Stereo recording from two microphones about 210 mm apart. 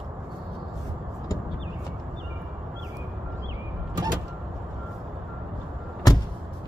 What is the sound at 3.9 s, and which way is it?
Vehicle, 20° right (ahead or behind).